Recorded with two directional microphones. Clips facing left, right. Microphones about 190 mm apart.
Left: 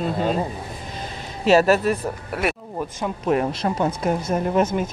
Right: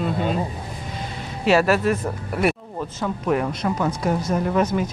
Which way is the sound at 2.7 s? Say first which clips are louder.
Even; 20° left (ahead or behind).